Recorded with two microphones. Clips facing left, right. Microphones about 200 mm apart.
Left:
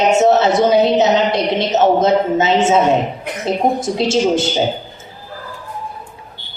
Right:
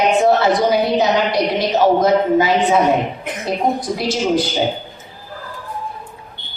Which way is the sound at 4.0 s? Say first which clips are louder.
Left 5 dB; 25° left (ahead or behind).